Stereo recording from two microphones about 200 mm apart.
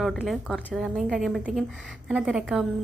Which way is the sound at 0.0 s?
Centre (ahead or behind).